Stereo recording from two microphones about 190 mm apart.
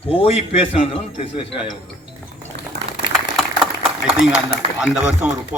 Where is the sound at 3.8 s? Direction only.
Centre (ahead or behind).